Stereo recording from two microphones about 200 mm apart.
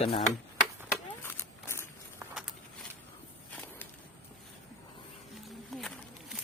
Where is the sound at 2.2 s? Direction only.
5° right (ahead or behind).